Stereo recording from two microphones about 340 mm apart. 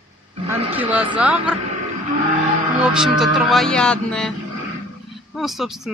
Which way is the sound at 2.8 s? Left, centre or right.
Centre.